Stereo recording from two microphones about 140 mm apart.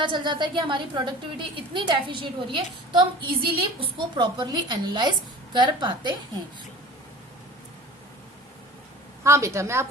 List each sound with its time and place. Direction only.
0.0 s a woman's voice: 35° right (ahead or behind)
9.2 s a woman's voice: 20° right (ahead or behind)